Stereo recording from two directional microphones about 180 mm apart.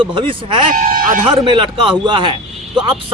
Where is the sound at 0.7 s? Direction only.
50° right (ahead or behind).